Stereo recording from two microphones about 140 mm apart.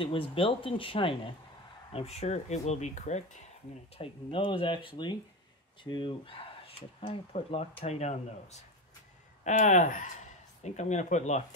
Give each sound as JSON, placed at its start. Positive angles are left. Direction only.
{"t": 0.0, "sound": "speech", "side_deg": 40}
{"t": 4.0, "sound": "speech", "side_deg": 35}